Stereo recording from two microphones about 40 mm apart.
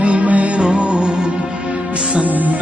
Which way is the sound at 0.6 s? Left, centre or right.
Right.